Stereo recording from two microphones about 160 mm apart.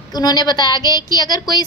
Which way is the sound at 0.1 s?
25° left (ahead or behind).